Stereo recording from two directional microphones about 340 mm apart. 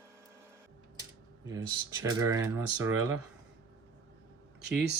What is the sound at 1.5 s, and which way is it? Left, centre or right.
Speech, centre.